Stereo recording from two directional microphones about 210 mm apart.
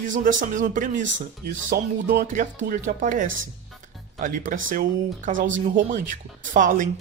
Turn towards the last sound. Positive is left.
turn(degrees=-40)  # may be behind; listen again after turning